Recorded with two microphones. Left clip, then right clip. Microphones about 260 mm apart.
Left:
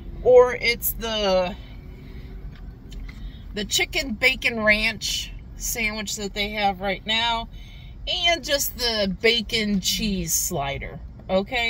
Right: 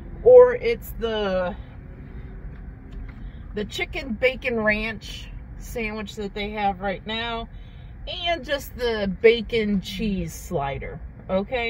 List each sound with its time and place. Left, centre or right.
0.2 s a woman's voice: left
3.5 s a woman's voice: left